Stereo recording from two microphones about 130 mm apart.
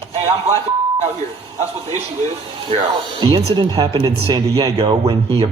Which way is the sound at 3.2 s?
40° right (ahead or behind).